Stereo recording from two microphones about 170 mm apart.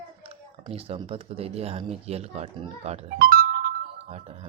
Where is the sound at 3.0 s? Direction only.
60° right (ahead or behind).